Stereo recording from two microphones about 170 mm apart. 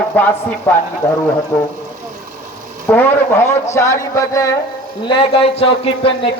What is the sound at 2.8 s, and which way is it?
A man's voice, 15° left (ahead or behind).